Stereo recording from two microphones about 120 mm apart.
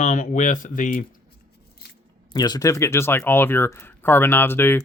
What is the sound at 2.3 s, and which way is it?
Speech, 35° left (ahead or behind).